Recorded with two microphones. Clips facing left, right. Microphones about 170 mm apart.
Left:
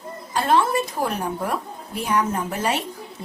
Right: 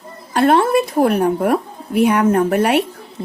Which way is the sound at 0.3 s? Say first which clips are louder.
Right 7 dB; 65° right (ahead or behind).